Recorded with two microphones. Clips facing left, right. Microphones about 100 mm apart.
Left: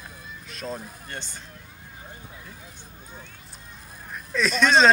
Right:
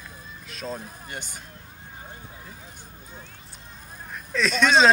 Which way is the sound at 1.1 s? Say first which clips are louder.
Even; 10° right (ahead or behind).